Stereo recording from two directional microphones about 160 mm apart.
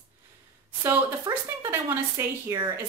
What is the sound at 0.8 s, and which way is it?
Speech, 15° right (ahead or behind).